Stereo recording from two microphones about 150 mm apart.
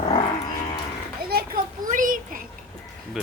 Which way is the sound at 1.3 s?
75° right (ahead or behind).